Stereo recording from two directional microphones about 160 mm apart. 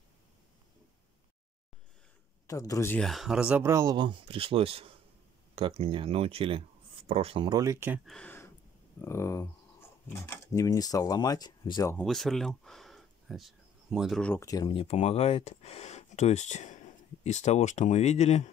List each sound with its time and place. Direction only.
2.4 s speech: 20° left (ahead or behind)
3.0 s speech: centre (ahead or behind); by 8.0 s 15° right (ahead or behind)
8.0 s speech: centre (ahead or behind)
9.0 s speech: 15° left (ahead or behind)
11.9 s speech: 5° left (ahead or behind)
14.4 s speech: 20° left (ahead or behind)
14.7 s speech: 35° left (ahead or behind)